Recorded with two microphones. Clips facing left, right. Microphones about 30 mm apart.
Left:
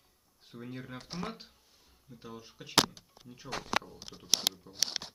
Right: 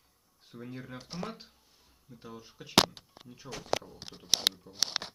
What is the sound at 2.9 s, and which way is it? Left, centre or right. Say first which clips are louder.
Speech: right 3 dB; right.